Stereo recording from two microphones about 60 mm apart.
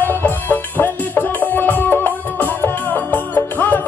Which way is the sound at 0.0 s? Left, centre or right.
Left.